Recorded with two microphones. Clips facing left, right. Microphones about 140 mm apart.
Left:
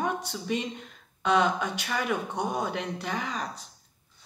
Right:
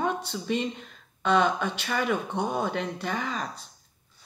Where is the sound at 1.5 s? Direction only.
15° left (ahead or behind).